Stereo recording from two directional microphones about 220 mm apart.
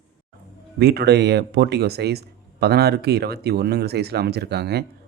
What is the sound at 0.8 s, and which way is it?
Speech, 45° right (ahead or behind).